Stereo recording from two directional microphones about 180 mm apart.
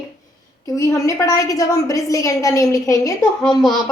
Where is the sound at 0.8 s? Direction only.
15° left (ahead or behind).